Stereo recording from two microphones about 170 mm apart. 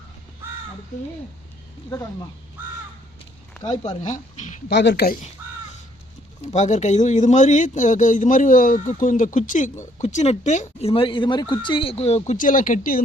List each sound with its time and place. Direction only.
1.9 s speech: 20° left (ahead or behind)
3.7 s a man's voice: 45° left (ahead or behind)
4.7 s speech: 85° left
6.5 s a man's voice: 45° left (ahead or behind)